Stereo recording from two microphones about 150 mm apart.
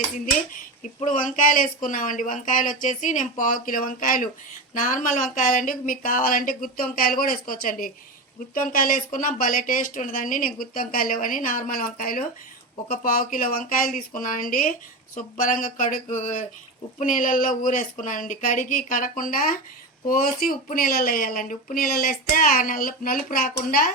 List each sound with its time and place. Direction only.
1.0 s speech: 60° left (ahead or behind)